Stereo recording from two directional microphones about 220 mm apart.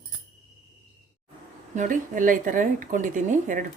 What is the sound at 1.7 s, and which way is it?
Speech, 35° right (ahead or behind).